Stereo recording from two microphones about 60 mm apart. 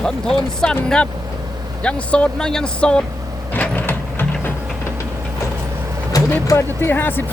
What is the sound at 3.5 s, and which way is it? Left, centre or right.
Printer, left.